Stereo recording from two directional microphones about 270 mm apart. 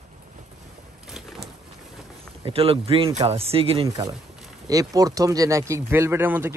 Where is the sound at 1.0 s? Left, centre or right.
Centre.